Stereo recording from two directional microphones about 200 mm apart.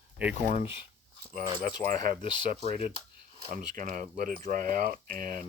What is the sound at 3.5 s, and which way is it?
Speech, 40° right (ahead or behind).